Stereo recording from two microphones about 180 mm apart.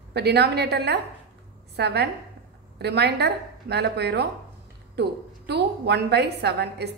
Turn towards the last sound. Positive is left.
turn(degrees=-65)  # may be behind; listen again after turning